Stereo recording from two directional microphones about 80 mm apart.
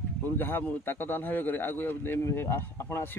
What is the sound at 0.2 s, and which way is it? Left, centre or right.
A man's voice, left.